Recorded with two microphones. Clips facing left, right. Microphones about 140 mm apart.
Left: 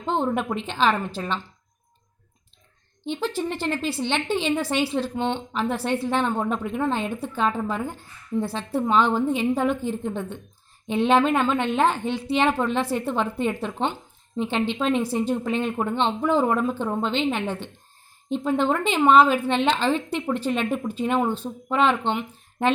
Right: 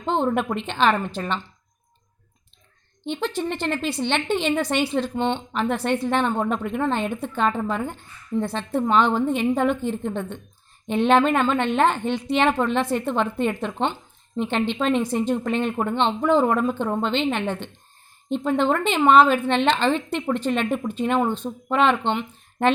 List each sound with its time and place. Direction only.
0.0 s a woman's voice: 5° left (ahead or behind)
3.0 s a woman's voice: 5° left (ahead or behind)